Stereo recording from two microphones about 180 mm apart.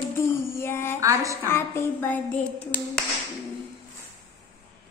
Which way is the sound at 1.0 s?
20° right (ahead or behind).